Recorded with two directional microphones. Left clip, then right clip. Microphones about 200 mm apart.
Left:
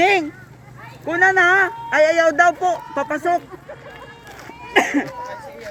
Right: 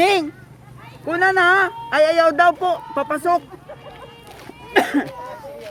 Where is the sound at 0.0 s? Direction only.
30° right (ahead or behind).